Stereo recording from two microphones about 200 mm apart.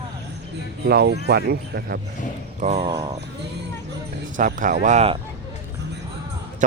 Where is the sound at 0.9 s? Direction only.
55° right (ahead or behind).